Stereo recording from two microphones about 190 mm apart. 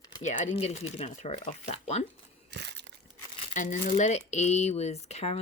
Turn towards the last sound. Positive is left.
turn(degrees=35)  # may be behind; listen again after turning